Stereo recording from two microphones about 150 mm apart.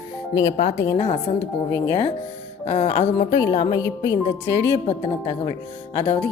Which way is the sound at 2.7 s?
40° left (ahead or behind).